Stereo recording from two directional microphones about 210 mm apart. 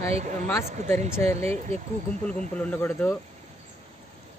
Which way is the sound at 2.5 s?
5° left (ahead or behind).